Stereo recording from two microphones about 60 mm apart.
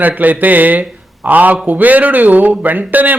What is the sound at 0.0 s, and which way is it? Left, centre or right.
A man's voice, right.